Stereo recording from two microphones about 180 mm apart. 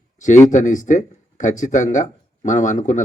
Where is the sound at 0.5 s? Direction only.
45° left (ahead or behind).